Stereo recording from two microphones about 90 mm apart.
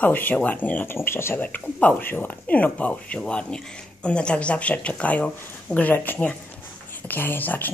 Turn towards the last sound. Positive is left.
turn(degrees=20)  # may be behind; listen again after turning